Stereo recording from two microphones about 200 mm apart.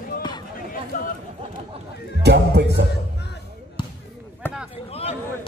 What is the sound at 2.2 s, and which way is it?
Music, 55° right (ahead or behind).